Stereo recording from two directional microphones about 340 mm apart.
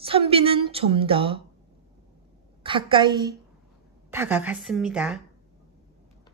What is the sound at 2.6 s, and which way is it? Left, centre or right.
A woman's voice, centre.